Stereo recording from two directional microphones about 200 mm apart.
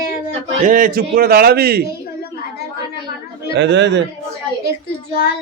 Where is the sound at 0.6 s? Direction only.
45° right (ahead or behind).